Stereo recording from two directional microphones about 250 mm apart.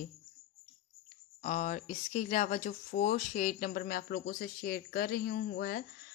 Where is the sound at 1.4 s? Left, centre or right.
Left.